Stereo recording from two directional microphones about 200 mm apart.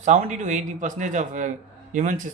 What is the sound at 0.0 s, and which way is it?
A man's voice, 35° right (ahead or behind).